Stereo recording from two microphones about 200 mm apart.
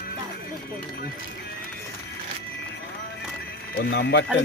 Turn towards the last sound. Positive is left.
turn(degrees=60)  # may be behind; listen again after turning